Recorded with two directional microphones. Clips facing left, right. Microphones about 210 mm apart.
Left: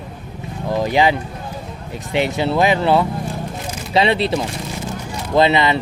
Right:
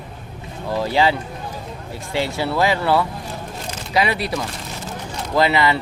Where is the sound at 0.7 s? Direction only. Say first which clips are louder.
Left 2 dB; 15° left (ahead or behind).